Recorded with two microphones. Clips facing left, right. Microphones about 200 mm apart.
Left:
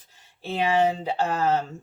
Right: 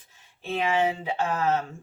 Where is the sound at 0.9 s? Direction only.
35° left (ahead or behind).